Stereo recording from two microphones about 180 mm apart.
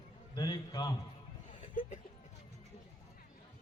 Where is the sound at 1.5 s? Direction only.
45° left (ahead or behind).